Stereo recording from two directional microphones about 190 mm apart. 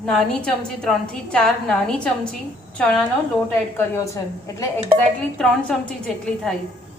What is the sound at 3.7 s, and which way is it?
Speech, 15° left (ahead or behind).